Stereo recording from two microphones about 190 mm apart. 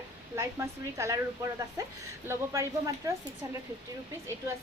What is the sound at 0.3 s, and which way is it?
A woman's voice, 15° right (ahead or behind).